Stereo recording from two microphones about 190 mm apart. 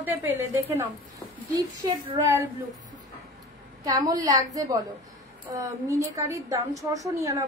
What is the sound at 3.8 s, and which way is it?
Speech, 20° right (ahead or behind).